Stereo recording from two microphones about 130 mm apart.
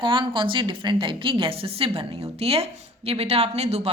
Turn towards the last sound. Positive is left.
turn(degrees=-55)  # may be behind; listen again after turning